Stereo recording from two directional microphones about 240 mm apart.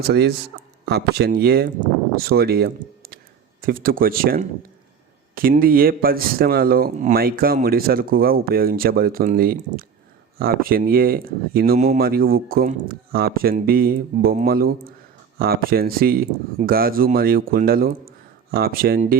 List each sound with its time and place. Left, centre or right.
0.1 s speech: right